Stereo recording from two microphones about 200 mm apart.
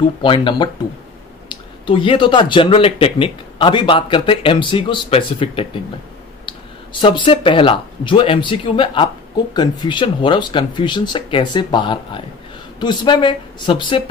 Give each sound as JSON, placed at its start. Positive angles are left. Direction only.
{"t": 0.2, "sound": "speech", "side_deg": 25}
{"t": 6.9, "sound": "speech", "side_deg": 25}